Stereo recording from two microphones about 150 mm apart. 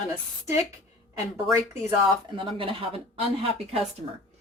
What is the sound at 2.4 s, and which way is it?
Speech, 35° right (ahead or behind).